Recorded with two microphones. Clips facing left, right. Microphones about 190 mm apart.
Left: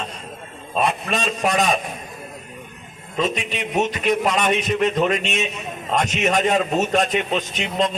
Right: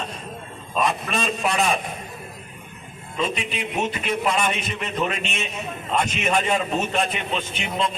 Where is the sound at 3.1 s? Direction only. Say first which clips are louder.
Left 3 dB; 40° left (ahead or behind).